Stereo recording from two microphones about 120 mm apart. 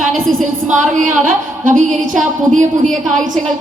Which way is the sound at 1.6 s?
90° right.